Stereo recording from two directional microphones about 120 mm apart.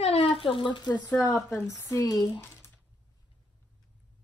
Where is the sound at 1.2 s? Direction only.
25° left (ahead or behind).